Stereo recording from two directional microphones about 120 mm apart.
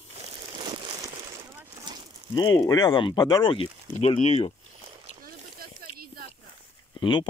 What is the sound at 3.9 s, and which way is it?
Speech, 60° left (ahead or behind).